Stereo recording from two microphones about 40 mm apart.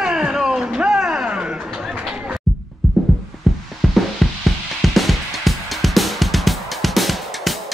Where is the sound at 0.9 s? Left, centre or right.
Centre.